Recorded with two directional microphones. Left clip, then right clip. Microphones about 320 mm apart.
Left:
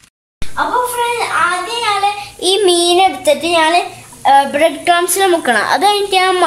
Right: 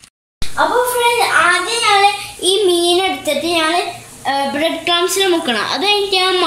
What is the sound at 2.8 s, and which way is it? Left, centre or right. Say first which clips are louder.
Child singing: left 4 dB; left.